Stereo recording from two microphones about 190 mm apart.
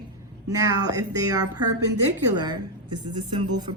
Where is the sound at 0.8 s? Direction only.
20° right (ahead or behind).